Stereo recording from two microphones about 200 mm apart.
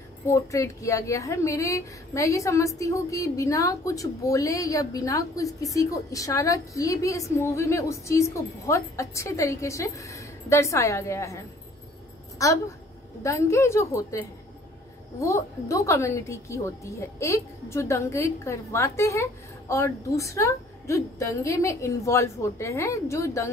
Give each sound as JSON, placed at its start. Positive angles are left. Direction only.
{"t": 0.3, "sound": "a woman's voice", "side_deg": 15}
{"t": 15.1, "sound": "a woman's voice", "side_deg": 15}